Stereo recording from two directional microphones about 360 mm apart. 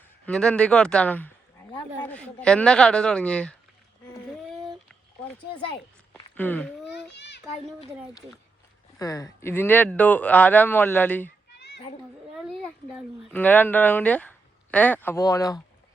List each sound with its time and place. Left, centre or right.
0.3 s speech: centre
4.1 s a sound: centre
6.3 s speech: centre
7.1 s a sound: left
9.0 s speech: centre
12.4 s speech: centre